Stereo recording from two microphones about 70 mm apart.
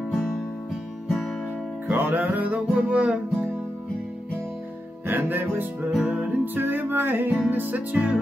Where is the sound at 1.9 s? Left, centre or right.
Right.